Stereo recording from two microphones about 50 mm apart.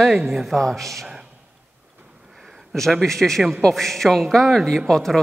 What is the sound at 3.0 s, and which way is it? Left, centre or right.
A man's voice, centre.